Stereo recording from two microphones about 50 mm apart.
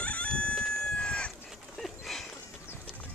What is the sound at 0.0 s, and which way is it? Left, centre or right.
Chicken, left.